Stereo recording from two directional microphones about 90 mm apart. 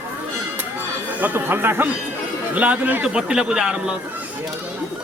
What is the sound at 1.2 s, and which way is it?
A man's voice, 20° right (ahead or behind).